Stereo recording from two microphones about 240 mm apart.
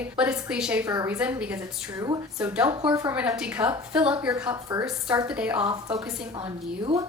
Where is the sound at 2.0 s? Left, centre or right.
Centre.